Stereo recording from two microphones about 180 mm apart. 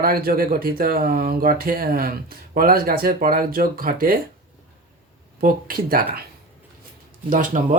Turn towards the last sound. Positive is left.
turn(degrees=-50)  # may be behind; listen again after turning